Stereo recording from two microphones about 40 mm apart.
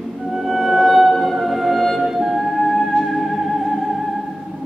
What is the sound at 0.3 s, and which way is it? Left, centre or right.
Music, centre.